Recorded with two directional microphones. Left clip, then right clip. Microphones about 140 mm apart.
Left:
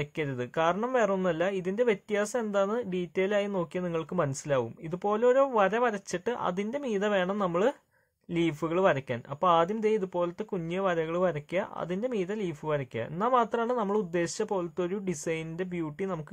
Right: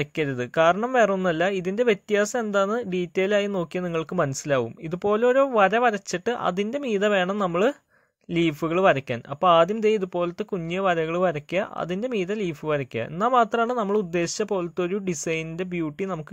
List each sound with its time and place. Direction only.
0.0 s speech: 30° right (ahead or behind)